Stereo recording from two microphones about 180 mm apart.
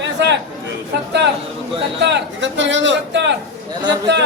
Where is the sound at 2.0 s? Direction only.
75° right (ahead or behind).